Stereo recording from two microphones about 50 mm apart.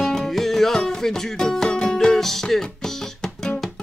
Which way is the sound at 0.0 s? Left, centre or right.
Centre.